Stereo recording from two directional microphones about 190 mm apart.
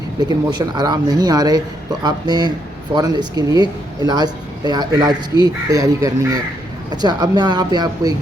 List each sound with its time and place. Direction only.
0.2 s speech: 20° right (ahead or behind)